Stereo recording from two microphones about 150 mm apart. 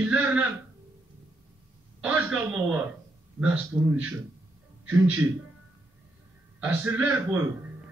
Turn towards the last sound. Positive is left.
turn(degrees=-15)  # may be behind; listen again after turning